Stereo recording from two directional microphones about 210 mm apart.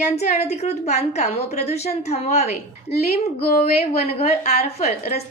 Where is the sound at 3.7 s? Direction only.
30° left (ahead or behind).